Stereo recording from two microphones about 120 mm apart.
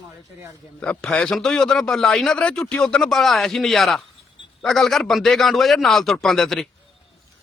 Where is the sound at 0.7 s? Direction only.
10° left (ahead or behind).